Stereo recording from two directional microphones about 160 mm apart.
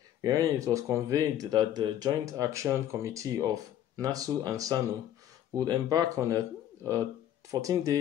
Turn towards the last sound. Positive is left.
turn(degrees=-20)  # may be behind; listen again after turning